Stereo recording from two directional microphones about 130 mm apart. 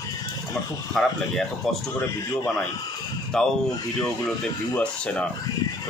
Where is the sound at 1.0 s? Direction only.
5° left (ahead or behind).